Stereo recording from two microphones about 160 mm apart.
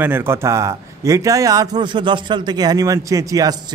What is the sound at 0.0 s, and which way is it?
Speech, 15° right (ahead or behind).